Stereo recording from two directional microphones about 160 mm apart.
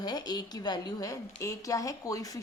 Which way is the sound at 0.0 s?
25° left (ahead or behind).